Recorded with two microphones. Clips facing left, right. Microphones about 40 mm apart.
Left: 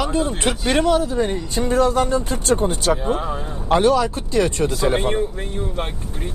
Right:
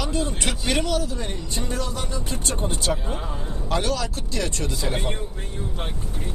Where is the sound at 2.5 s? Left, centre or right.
Left.